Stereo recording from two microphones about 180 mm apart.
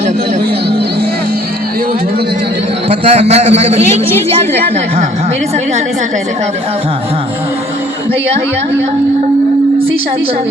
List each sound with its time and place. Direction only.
2.9 s a man's voice: 35° right (ahead or behind)